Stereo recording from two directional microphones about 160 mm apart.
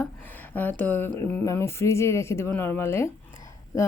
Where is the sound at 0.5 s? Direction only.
10° left (ahead or behind).